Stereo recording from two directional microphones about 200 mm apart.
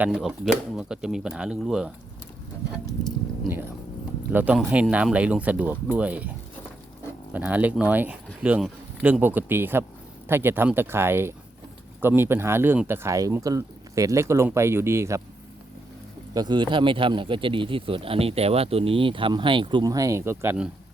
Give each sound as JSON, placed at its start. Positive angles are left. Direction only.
{"t": 0.0, "sound": "speech", "side_deg": -5}
{"t": 4.3, "sound": "speech", "side_deg": -10}
{"t": 7.3, "sound": "speech", "side_deg": -10}
{"t": 16.3, "sound": "speech", "side_deg": -20}